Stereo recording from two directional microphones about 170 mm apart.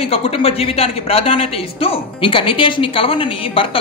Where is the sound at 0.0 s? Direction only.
35° left (ahead or behind).